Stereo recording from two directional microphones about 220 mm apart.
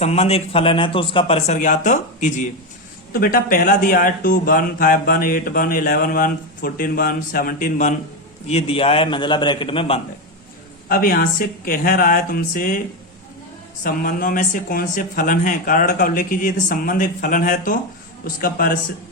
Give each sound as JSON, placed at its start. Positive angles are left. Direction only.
{"t": 0.0, "sound": "a man's voice", "side_deg": 30}
{"t": 10.8, "sound": "a man's voice", "side_deg": 40}
{"t": 13.8, "sound": "a man's voice", "side_deg": 40}